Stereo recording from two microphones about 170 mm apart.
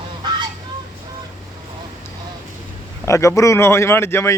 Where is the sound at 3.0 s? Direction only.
15° left (ahead or behind).